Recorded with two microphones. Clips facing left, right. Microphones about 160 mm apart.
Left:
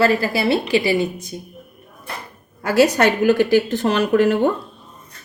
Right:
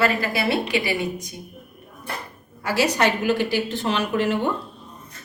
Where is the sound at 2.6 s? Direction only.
45° left (ahead or behind).